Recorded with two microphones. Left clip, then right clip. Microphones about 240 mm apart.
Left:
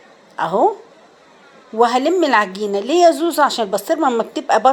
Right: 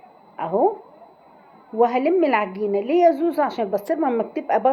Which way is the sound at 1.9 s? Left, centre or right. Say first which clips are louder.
Left 3 dB; centre.